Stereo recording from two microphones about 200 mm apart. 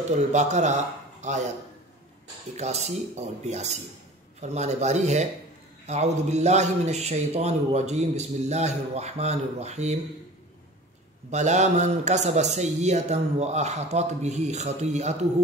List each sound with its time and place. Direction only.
0.3 s a man's voice: 35° right (ahead or behind)
2.5 s a man's voice: 35° right (ahead or behind)
11.2 s a man's voice: 35° right (ahead or behind)